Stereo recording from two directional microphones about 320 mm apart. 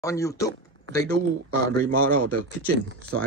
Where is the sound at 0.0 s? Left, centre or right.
Centre.